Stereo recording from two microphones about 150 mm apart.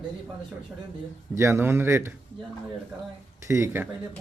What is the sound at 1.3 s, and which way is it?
Speech, 15° right (ahead or behind).